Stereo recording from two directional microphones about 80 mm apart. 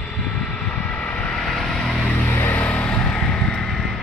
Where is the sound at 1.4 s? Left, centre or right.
Centre.